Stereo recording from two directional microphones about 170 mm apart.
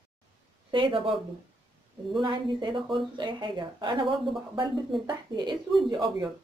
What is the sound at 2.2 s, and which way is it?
A woman's voice, 30° right (ahead or behind).